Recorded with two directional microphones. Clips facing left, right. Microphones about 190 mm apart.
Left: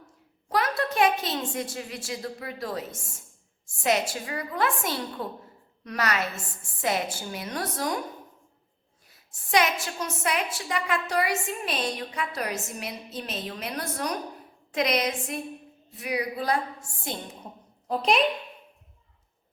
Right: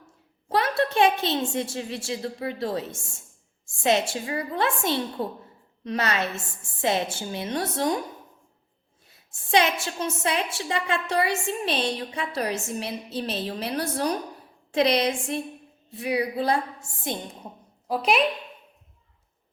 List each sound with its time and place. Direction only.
0.4 s a woman's voice: 30° right (ahead or behind)
9.0 s a woman's voice: 25° right (ahead or behind)
17.8 s a child's voice: 5° right (ahead or behind)